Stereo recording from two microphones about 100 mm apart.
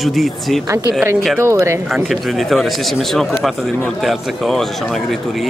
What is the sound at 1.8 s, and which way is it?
Speech, centre (ahead or behind).